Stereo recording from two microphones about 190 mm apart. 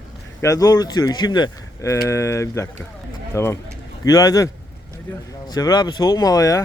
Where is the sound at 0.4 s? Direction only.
15° left (ahead or behind).